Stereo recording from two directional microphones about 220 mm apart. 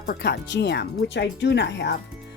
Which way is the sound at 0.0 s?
45° left (ahead or behind).